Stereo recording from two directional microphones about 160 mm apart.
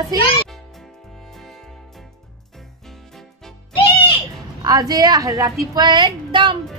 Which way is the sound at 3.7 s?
35° left (ahead or behind).